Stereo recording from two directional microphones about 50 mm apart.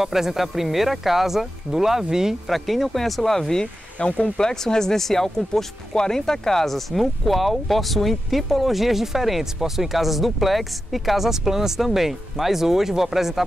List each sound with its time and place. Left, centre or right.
0.0 s speech: centre
2.5 s speech: centre